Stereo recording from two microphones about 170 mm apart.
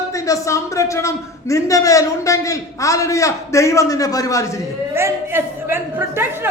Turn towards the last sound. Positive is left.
turn(degrees=-15)  # may be behind; listen again after turning